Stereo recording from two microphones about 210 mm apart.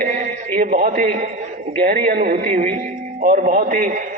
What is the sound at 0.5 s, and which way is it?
A man's voice, 40° right (ahead or behind).